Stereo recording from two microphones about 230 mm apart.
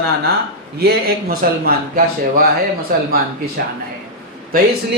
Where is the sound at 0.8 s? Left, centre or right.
Right.